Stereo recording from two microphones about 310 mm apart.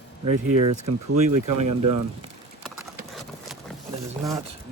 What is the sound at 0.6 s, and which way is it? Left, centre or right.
Speech, right.